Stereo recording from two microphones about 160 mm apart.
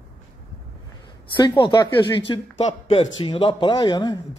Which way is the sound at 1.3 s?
30° left (ahead or behind).